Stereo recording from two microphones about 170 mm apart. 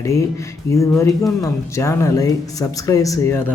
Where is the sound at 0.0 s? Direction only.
20° left (ahead or behind).